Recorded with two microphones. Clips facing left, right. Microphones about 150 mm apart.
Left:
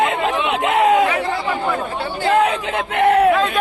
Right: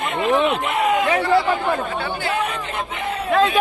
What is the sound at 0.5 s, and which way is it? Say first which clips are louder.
Speech: left 5 dB; 90° left.